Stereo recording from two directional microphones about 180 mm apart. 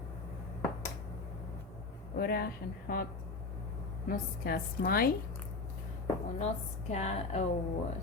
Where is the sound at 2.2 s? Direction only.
60° left (ahead or behind).